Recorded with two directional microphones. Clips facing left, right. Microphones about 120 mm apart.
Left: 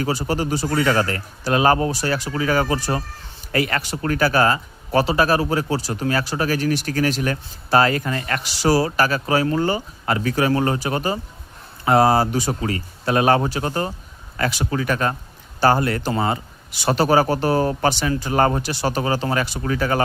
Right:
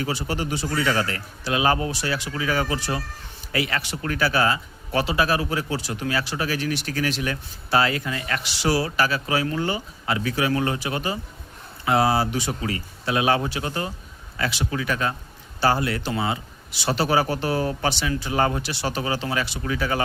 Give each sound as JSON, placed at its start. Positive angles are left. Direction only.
{"t": 0.0, "sound": "speech", "side_deg": 40}